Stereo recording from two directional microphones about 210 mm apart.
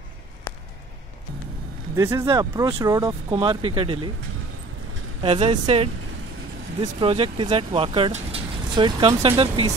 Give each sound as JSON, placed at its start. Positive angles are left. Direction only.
{"t": 2.0, "sound": "speech", "side_deg": -15}
{"t": 5.2, "sound": "speech", "side_deg": -25}